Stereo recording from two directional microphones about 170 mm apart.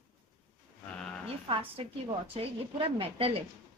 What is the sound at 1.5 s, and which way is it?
A woman's voice, 30° right (ahead or behind).